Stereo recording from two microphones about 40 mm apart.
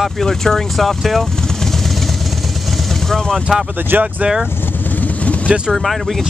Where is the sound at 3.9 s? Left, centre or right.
Right.